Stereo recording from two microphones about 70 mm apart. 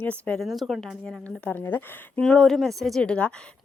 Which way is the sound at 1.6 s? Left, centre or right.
Left.